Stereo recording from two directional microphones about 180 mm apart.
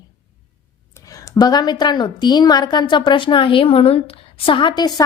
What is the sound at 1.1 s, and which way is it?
A woman's voice, 20° left (ahead or behind).